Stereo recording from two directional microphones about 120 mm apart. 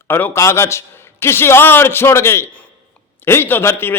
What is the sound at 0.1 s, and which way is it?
A man's voice, 15° left (ahead or behind).